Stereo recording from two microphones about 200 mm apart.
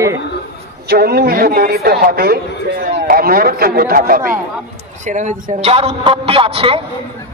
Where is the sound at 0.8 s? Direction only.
50° right (ahead or behind); by 6.8 s 25° right (ahead or behind).